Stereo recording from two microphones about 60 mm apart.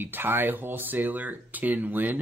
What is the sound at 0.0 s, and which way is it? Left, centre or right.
Speech, right.